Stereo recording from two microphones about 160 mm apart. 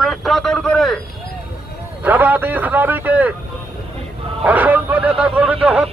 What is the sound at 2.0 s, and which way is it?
A man's voice, 10° right (ahead or behind).